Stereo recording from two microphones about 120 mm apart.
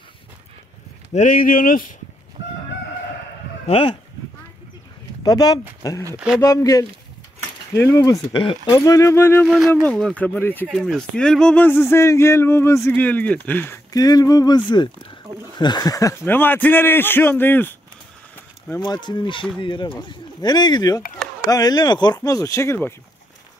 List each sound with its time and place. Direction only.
1.1 s speech: 90° left
3.6 s speech: 50° left (ahead or behind)
5.2 s speech: 30° left (ahead or behind)
6.1 s speech: 5° right (ahead or behind)
6.4 s speech: 25° left (ahead or behind)
8.3 s speech: 45° left (ahead or behind)
8.6 s speech: 30° left (ahead or behind)
9.8 s a man's voice: 5° left (ahead or behind)
10.7 s speech: centre (ahead or behind)
13.9 s speech: 30° left (ahead or behind)
16.3 s a man's voice: 15° left (ahead or behind)
18.8 s speech: 40° left (ahead or behind); by 22.9 s 20° left (ahead or behind)